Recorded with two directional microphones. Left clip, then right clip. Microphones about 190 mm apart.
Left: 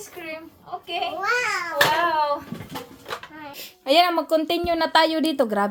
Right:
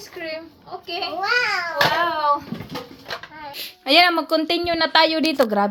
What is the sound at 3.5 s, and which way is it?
A woman's voice, centre (ahead or behind).